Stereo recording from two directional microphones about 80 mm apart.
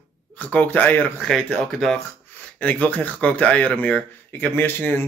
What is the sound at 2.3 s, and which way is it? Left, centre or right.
Speech, centre.